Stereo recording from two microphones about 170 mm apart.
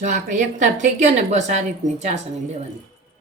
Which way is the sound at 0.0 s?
50° right (ahead or behind).